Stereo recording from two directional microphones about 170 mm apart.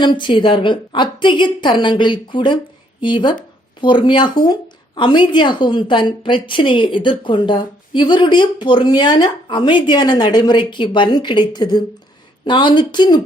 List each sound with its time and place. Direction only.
0.0 s a woman's voice: 30° left (ahead or behind)